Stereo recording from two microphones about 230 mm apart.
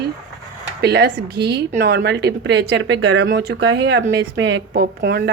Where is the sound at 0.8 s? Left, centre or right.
Right.